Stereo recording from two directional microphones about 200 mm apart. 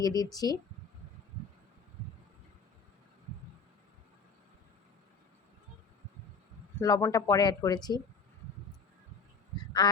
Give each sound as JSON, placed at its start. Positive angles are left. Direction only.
{"t": 0.0, "sound": "speech", "side_deg": 20}
{"t": 6.7, "sound": "speech", "side_deg": 15}
{"t": 9.8, "sound": "speech", "side_deg": 20}